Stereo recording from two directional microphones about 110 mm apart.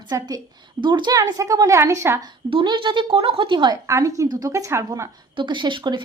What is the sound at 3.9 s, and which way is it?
A woman's voice, 30° right (ahead or behind).